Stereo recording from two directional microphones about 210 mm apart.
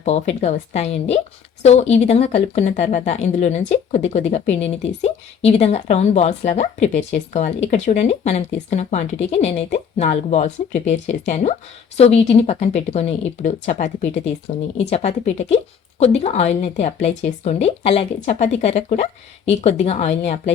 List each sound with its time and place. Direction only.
0.0 s speech: 30° left (ahead or behind)